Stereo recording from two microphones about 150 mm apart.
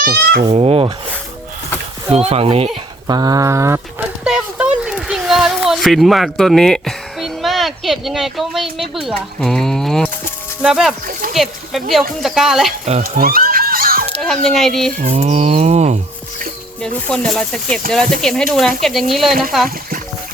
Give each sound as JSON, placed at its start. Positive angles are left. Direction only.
{"t": 0.0, "sound": "speech", "side_deg": -90}
{"t": 0.5, "sound": "speech", "side_deg": -40}
{"t": 2.0, "sound": "speech", "side_deg": -45}
{"t": 3.1, "sound": "a sound", "side_deg": -25}
{"t": 4.0, "sound": "a sound", "side_deg": -5}
{"t": 8.8, "sound": "speech", "side_deg": 0}
{"t": 13.0, "sound": "a sound", "side_deg": -75}
{"t": 14.2, "sound": "speech", "side_deg": 0}
{"t": 15.1, "sound": "livestock", "side_deg": -45}
{"t": 16.8, "sound": "speech", "side_deg": 5}